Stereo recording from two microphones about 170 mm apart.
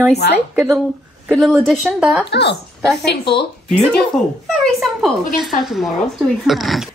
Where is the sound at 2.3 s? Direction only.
80° left.